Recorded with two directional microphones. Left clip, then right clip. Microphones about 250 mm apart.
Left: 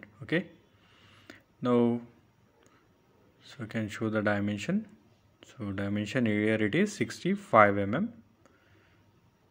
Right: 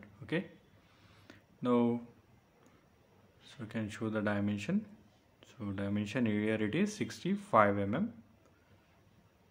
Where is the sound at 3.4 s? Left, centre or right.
Centre.